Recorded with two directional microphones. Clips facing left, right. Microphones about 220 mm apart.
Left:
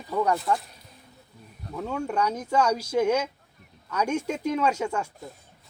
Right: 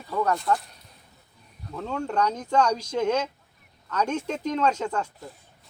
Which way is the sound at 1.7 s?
10° left (ahead or behind).